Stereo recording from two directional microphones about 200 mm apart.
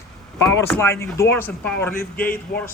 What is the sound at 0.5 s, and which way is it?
Speech, 15° left (ahead or behind).